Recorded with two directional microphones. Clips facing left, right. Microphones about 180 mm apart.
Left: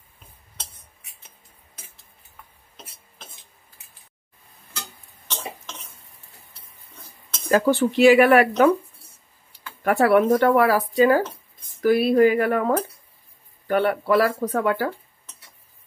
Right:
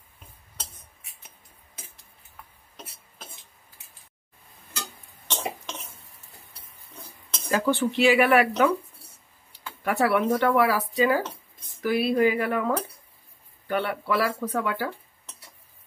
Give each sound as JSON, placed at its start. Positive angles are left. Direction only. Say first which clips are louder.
{"t": 7.5, "sound": "speech", "louder": "left 5 dB", "side_deg": 45}
{"t": 9.8, "sound": "speech", "louder": "left 6 dB", "side_deg": 45}